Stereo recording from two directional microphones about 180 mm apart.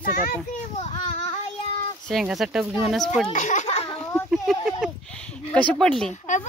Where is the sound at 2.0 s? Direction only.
Centre (ahead or behind).